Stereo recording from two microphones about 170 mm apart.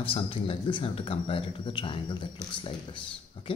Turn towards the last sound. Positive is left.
turn(degrees=30)  # may be behind; listen again after turning